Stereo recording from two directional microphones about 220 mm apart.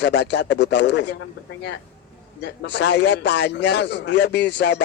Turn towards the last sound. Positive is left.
turn(degrees=50)  # may be behind; listen again after turning